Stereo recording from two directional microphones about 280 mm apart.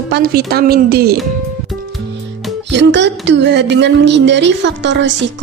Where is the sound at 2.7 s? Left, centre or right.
Right.